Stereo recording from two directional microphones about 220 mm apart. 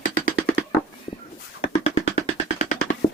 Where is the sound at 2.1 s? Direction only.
35° left (ahead or behind).